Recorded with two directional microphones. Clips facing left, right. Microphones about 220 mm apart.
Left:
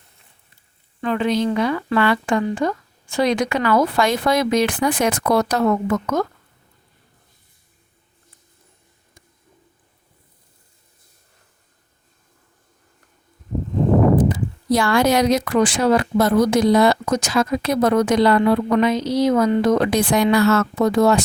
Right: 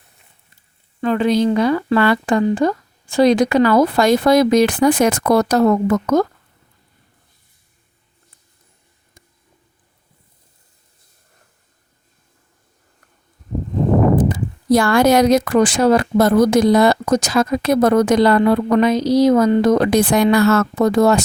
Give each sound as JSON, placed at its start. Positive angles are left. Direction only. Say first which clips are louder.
{"t": 1.0, "sound": "a woman's voice", "louder": "right 4 dB", "side_deg": -40}
{"t": 14.3, "sound": "speech", "louder": "right 3 dB", "side_deg": -50}